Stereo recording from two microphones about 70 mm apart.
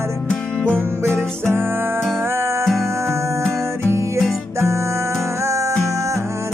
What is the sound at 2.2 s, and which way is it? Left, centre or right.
Music, right.